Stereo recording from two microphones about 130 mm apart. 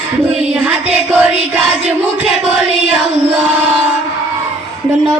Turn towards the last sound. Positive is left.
turn(degrees=-10)  # may be behind; listen again after turning